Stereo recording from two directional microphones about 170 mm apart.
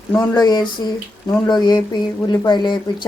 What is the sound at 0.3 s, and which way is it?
Speech, 25° left (ahead or behind).